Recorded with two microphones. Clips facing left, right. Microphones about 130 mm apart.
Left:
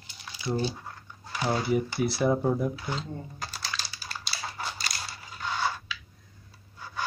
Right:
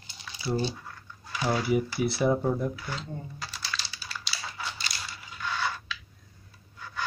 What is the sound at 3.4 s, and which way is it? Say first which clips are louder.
Typing: left 1 dB; 45° left (ahead or behind).